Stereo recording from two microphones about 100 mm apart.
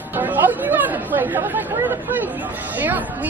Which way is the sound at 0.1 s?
20° right (ahead or behind).